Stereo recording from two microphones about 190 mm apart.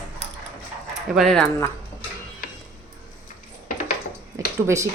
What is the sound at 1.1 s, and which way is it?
Speech, centre (ahead or behind).